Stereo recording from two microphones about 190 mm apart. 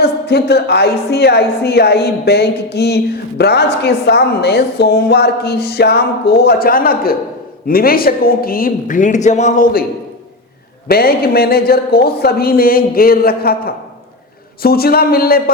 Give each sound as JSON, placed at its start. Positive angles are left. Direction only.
{"t": 0.0, "sound": "a woman's voice", "side_deg": 60}
{"t": 10.8, "sound": "speech", "side_deg": 55}